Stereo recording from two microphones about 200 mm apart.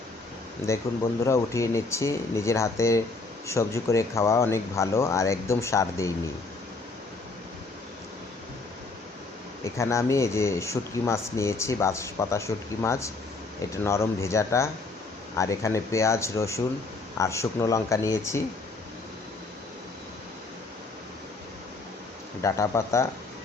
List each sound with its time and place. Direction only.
1.2 s speech: 15° left (ahead or behind)
9.7 s speech: 15° left (ahead or behind)
22.4 s speech: 15° left (ahead or behind)